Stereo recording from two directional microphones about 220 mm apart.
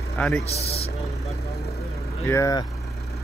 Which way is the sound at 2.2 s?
15° left (ahead or behind).